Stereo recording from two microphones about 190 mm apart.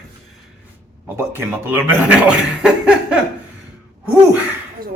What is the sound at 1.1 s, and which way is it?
Speech, 10° right (ahead or behind).